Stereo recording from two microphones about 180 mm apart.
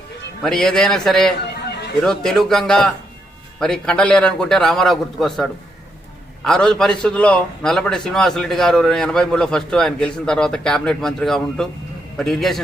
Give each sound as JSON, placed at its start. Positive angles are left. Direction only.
{"t": 0.4, "sound": "a man's voice", "side_deg": 5}
{"t": 1.6, "sound": "a sound", "side_deg": 65}
{"t": 2.0, "sound": "a man's voice", "side_deg": 5}